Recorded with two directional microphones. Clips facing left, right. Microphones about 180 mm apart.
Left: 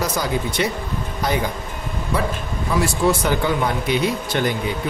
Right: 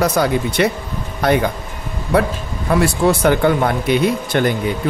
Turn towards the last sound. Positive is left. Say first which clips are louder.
# right 4 dB
turn(degrees=-55)  # may be behind; listen again after turning